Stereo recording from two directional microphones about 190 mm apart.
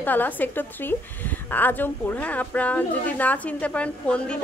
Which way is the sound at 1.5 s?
10° left (ahead or behind).